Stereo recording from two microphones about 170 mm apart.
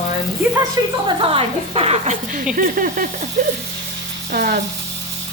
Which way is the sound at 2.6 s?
55° right (ahead or behind).